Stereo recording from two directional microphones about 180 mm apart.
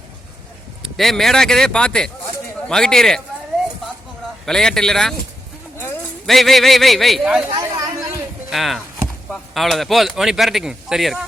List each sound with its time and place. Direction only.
0.8 s speech: centre (ahead or behind)
4.4 s speech: 5° left (ahead or behind)
6.2 s speech: centre (ahead or behind)
7.5 s chatter: 20° right (ahead or behind)
8.4 s speech: centre (ahead or behind)